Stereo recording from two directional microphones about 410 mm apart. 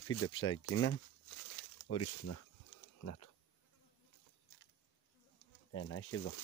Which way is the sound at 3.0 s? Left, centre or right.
Left.